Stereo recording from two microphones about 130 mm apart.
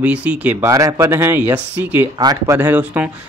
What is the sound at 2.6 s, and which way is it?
Speech, 10° right (ahead or behind).